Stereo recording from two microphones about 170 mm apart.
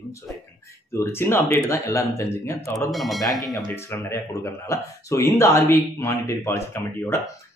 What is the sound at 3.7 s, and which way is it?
Speech, 15° left (ahead or behind).